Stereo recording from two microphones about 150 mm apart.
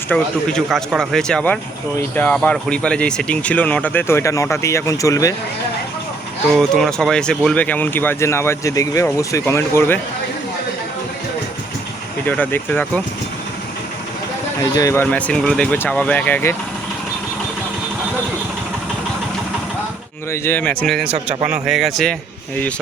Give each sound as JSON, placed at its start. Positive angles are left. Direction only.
{"t": 0.1, "sound": "speech", "side_deg": 5}
{"t": 6.6, "sound": "speech", "side_deg": 5}
{"t": 12.2, "sound": "speech", "side_deg": 10}
{"t": 14.6, "sound": "speech", "side_deg": 25}
{"t": 15.0, "sound": "speech", "side_deg": 5}
{"t": 20.3, "sound": "speech", "side_deg": 15}